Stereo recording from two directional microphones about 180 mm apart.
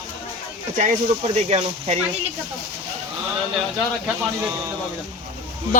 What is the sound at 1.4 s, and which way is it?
Speech, 35° right (ahead or behind).